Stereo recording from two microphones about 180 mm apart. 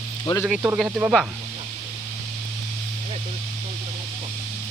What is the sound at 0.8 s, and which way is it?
Speech, 5° right (ahead or behind).